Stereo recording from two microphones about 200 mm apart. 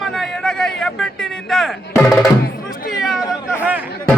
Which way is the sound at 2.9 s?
Centre (ahead or behind).